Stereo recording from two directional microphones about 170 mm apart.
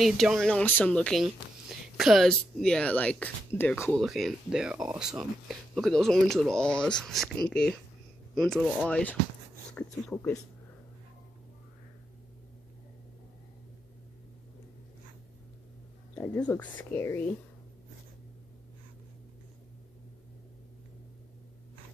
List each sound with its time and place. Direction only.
0.0 s speech: centre (ahead or behind)
16.2 s speech: 10° left (ahead or behind)